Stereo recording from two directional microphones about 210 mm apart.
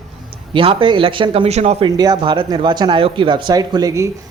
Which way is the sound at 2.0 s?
20° right (ahead or behind).